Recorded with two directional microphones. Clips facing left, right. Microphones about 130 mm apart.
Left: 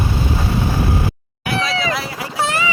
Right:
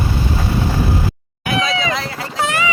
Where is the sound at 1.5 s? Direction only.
5° left (ahead or behind).